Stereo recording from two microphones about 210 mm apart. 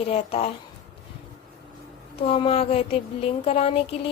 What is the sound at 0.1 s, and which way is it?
Speech, 30° left (ahead or behind).